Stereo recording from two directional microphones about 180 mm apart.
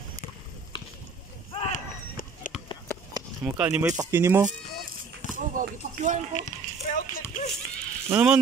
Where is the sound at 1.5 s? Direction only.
35° left (ahead or behind).